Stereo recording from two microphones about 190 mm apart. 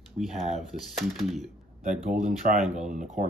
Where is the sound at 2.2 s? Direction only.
45° right (ahead or behind).